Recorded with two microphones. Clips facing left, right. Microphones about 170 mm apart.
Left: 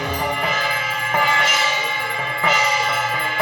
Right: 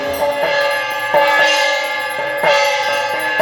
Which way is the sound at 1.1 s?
70° right (ahead or behind).